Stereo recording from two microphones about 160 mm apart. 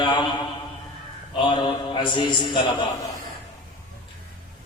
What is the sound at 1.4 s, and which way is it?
A man's voice, 30° left (ahead or behind).